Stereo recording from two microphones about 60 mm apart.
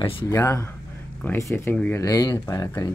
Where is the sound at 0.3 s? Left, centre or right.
Left.